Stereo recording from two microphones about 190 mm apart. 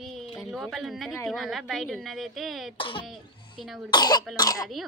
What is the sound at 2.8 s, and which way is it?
Speech, 25° left (ahead or behind).